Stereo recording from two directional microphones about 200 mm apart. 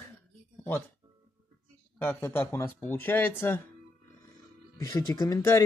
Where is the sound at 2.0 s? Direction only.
10° left (ahead or behind).